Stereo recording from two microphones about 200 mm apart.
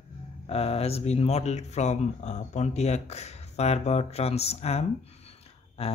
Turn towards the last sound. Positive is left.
turn(degrees=30)  # may be behind; listen again after turning